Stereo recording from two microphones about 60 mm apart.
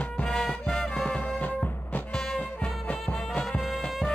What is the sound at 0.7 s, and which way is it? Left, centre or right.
Music, centre.